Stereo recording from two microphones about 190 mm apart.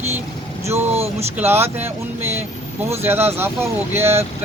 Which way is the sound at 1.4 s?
10° right (ahead or behind).